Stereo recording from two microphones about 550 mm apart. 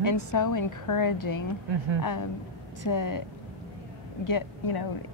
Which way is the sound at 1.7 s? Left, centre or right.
Right.